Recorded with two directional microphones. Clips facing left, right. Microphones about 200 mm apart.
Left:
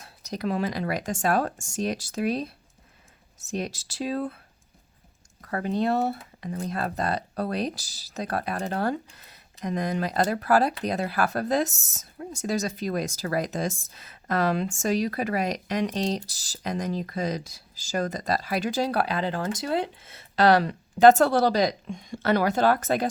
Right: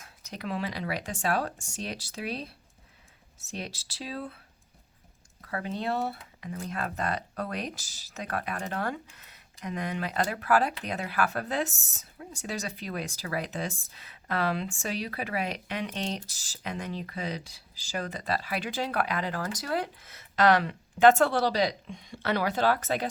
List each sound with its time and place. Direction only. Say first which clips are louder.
0.0 s speech: left 8 dB; 35° left (ahead or behind)
5.4 s speech: left 7 dB; 45° left (ahead or behind)